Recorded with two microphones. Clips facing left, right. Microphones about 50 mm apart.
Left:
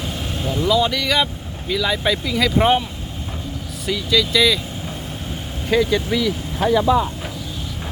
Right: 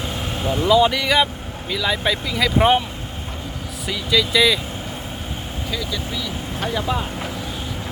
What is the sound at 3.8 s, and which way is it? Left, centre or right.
Speech, centre.